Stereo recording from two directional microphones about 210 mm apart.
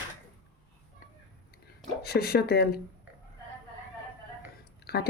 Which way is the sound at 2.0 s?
50° left (ahead or behind).